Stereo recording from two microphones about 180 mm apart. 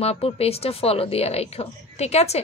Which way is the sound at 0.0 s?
35° left (ahead or behind).